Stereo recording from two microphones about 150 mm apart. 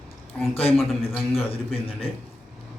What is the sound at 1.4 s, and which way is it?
Speech, 40° left (ahead or behind).